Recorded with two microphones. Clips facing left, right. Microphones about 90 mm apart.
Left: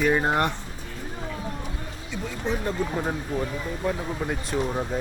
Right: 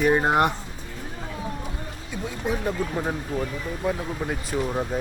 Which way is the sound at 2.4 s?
10° right (ahead or behind).